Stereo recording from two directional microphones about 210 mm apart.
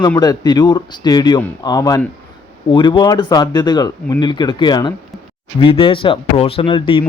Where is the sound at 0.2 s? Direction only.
20° left (ahead or behind).